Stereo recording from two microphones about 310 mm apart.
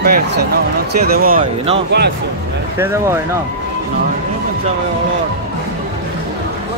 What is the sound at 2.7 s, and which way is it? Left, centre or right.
Speech, centre.